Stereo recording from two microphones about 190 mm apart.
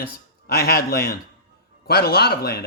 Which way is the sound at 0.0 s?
55° left (ahead or behind).